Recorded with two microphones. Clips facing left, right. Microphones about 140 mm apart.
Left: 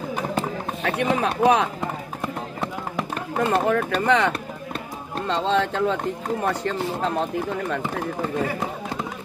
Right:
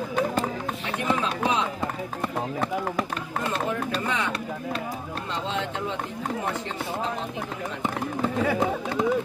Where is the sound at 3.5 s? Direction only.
70° left (ahead or behind).